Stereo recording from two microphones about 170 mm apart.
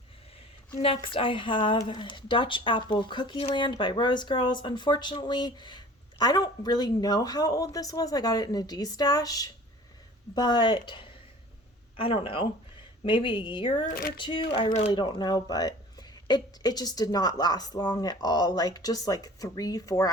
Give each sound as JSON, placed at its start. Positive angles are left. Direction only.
{"t": 0.8, "sound": "speech", "side_deg": 35}
{"t": 13.8, "sound": "speech", "side_deg": 60}
{"t": 14.2, "sound": "speech", "side_deg": 30}